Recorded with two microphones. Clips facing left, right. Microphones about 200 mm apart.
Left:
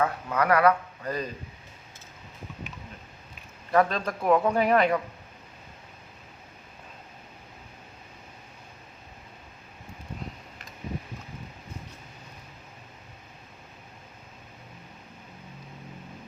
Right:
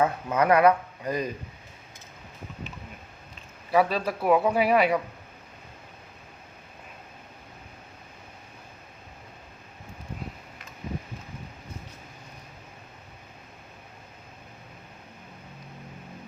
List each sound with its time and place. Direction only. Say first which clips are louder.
0.0 s a man's voice: right 2 dB; 20° right (ahead or behind)
3.7 s a man's voice: right 1 dB; 5° right (ahead or behind)